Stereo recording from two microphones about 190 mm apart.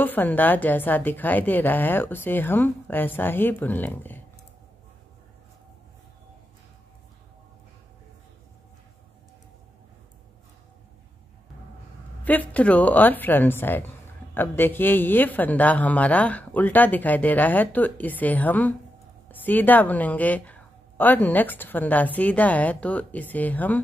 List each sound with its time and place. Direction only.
0.0 s speech: 10° left (ahead or behind)
12.3 s speech: 10° left (ahead or behind)